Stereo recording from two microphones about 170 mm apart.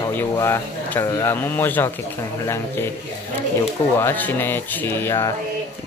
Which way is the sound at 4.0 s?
10° left (ahead or behind).